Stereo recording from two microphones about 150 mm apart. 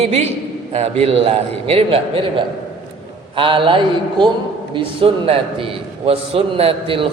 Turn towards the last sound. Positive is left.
turn(degrees=-40)  # may be behind; listen again after turning